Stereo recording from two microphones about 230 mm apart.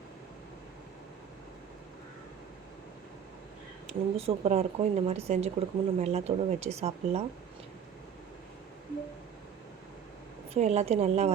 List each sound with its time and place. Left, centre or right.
3.8 s speech: right
10.5 s speech: right